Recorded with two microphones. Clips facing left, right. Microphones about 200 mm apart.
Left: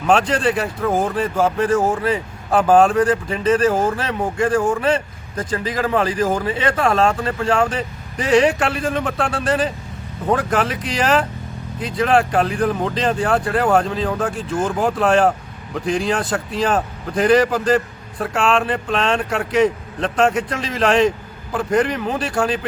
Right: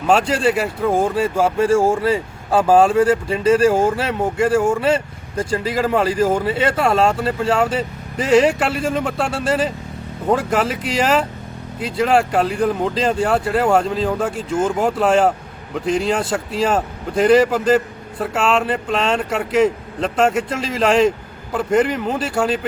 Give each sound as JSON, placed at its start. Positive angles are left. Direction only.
{"t": 0.0, "sound": "a man's voice", "side_deg": -5}